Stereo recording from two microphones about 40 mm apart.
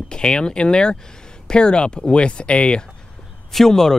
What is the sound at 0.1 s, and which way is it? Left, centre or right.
Speech, left.